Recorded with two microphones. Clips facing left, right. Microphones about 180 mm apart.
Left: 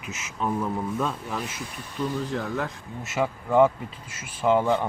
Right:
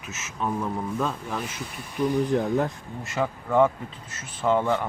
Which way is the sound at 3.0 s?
5° left (ahead or behind).